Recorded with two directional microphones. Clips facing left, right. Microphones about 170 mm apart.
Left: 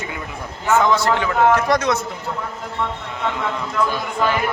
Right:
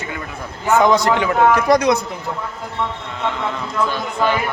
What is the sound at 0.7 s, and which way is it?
A man's voice, 15° right (ahead or behind).